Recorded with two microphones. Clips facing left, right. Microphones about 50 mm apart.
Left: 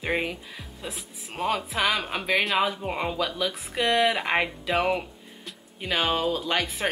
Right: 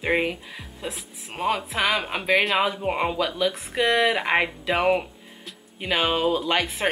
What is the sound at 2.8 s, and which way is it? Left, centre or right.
A woman's voice, centre.